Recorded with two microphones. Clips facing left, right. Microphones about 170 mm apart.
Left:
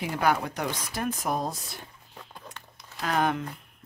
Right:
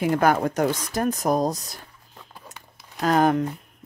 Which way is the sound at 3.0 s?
40° right (ahead or behind).